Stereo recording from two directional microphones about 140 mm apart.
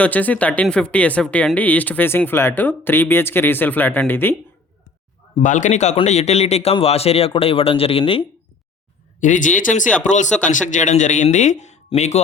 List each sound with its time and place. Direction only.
0.0 s speech: 10° left (ahead or behind)
5.4 s a man's voice: 65° left (ahead or behind); by 8.3 s 40° left (ahead or behind)
9.2 s speech: 65° left (ahead or behind)